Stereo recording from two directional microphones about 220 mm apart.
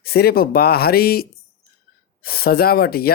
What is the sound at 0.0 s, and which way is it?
Speech, 45° left (ahead or behind).